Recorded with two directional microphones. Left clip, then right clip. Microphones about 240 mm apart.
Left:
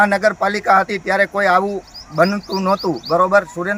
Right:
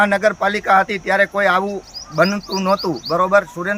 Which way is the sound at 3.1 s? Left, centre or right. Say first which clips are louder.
Left 1 dB; centre.